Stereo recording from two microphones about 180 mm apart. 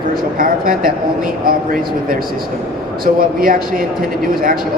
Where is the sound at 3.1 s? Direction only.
50° right (ahead or behind).